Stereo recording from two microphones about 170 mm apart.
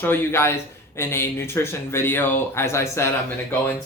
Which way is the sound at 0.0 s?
15° left (ahead or behind).